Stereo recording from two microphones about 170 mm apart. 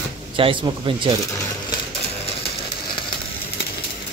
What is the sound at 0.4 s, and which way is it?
Speech, 30° right (ahead or behind).